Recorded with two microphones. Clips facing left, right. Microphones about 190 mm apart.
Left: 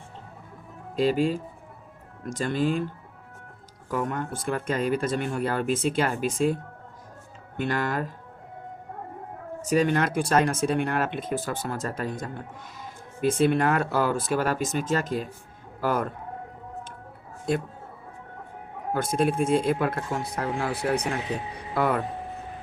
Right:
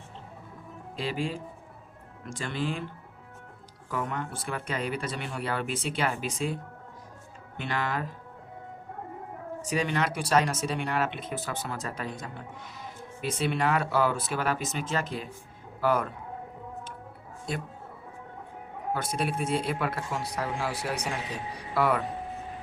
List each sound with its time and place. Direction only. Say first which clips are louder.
0.9 s speech: left 9 dB; 45° left (ahead or behind)
3.8 s speech: left 4 dB; 45° left (ahead or behind)
9.6 s speech: left 6 dB; 45° left (ahead or behind)
18.9 s speech: left 8 dB; 50° left (ahead or behind)